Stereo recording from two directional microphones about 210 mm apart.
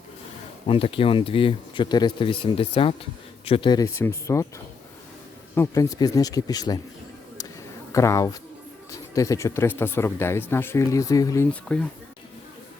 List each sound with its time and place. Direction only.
0.7 s speech: 25° left (ahead or behind)
5.5 s speech: 15° left (ahead or behind)
7.9 s speech: 15° left (ahead or behind)